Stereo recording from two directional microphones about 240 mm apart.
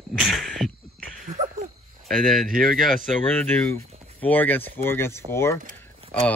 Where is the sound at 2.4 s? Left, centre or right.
Right.